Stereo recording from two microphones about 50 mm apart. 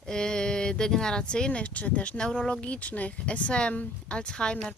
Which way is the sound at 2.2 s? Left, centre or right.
Centre.